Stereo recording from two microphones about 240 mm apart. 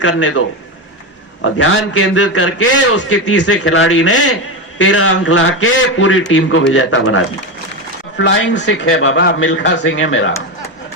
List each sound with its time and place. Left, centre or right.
0.0 s a man's voice: left
1.5 s a man's voice: left